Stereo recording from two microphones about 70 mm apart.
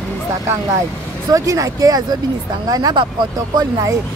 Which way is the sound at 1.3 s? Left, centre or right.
Right.